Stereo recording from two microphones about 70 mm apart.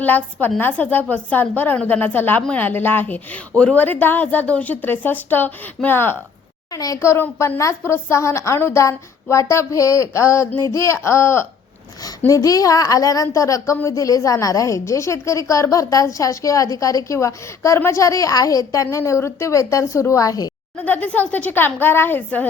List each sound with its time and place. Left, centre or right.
0.0 s a woman's voice: left
6.7 s a child's voice: left
7.6 s a woman's voice: left
12.2 s a woman's voice: left
20.8 s speech: left